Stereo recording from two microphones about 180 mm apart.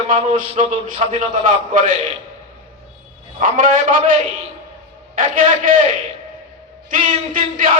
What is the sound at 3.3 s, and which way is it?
Speech, 50° right (ahead or behind).